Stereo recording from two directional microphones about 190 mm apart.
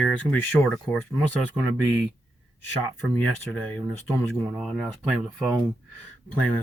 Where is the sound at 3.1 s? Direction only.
5° left (ahead or behind).